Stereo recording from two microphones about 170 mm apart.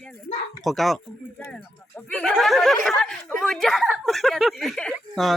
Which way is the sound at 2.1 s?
5° left (ahead or behind).